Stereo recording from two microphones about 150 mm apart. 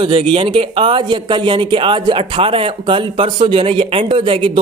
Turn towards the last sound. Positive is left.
turn(degrees=-35)  # may be behind; listen again after turning